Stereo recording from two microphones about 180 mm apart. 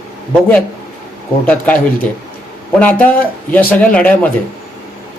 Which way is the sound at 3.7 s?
10° left (ahead or behind).